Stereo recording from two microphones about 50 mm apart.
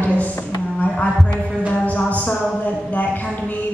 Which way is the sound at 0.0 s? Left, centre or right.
Left.